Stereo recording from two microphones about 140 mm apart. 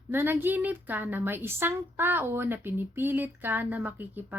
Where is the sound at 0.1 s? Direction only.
15° right (ahead or behind).